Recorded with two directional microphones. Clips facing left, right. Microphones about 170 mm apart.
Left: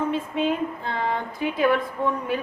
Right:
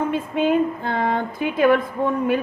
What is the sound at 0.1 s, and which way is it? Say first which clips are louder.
A woman's voice: right 4 dB; 60° right (ahead or behind).